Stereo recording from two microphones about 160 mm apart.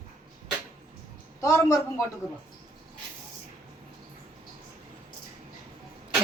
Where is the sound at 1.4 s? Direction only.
20° left (ahead or behind).